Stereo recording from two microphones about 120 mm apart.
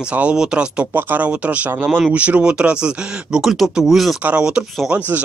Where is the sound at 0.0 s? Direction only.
10° right (ahead or behind).